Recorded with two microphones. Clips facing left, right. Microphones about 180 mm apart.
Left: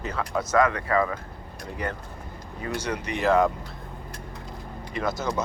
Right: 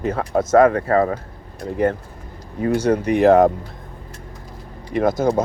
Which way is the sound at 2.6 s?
50° right (ahead or behind).